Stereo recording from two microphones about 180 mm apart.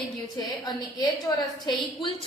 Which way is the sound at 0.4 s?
20° left (ahead or behind).